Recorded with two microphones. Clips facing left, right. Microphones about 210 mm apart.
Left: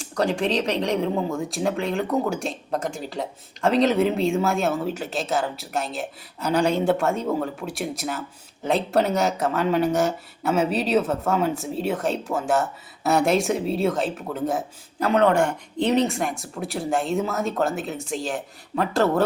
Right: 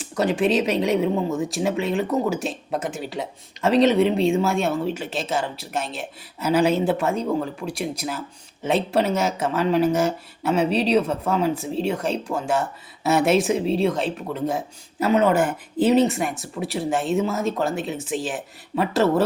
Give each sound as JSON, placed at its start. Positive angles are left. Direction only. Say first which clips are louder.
{"t": 0.0, "sound": "speech", "louder": "right 2 dB", "side_deg": -5}